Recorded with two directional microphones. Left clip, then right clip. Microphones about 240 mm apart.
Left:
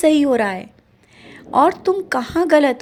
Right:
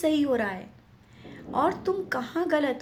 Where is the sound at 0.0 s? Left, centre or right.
Left.